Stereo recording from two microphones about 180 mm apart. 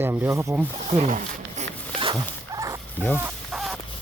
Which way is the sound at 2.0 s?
25° right (ahead or behind).